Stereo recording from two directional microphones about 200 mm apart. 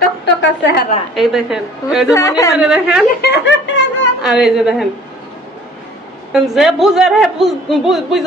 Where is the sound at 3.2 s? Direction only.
60° left (ahead or behind).